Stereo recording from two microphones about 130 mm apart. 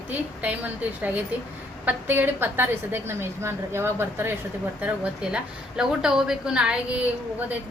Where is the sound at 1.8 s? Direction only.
15° right (ahead or behind).